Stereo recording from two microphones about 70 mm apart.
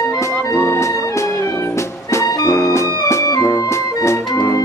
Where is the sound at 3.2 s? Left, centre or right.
Left.